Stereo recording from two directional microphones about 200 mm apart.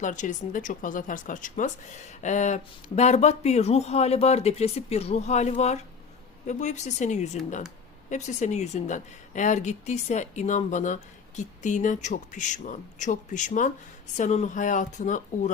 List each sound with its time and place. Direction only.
0.0 s speech: 40° left (ahead or behind)